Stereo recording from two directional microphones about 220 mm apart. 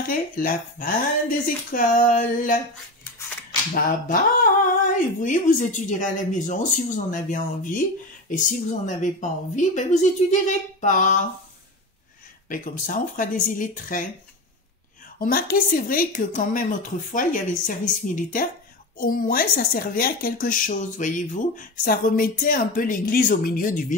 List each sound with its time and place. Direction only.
0.1 s a woman's voice: 40° left (ahead or behind)
3.7 s a woman's voice: 40° left (ahead or behind)
12.4 s a woman's voice: 40° left (ahead or behind)
15.1 s a woman's voice: 40° left (ahead or behind)